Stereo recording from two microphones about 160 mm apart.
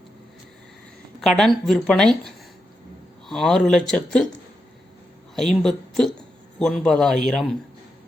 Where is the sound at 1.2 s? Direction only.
Centre (ahead or behind).